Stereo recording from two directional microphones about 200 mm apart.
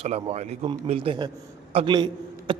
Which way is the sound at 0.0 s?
30° right (ahead or behind).